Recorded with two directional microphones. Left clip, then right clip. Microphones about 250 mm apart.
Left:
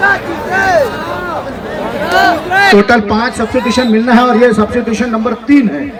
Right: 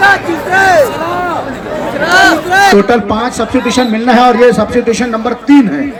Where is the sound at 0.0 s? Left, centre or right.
Right.